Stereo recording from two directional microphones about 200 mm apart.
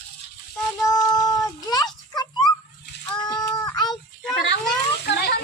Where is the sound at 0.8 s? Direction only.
20° left (ahead or behind).